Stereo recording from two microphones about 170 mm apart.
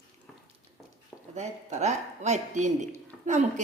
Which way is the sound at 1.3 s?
45° right (ahead or behind).